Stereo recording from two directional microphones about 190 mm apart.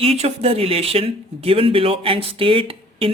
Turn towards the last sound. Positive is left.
turn(degrees=-30)  # may be behind; listen again after turning